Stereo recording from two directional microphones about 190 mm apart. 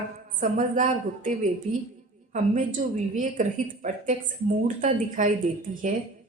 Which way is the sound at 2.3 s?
40° right (ahead or behind).